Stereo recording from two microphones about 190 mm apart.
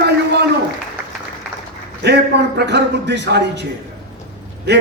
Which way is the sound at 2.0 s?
60° right (ahead or behind).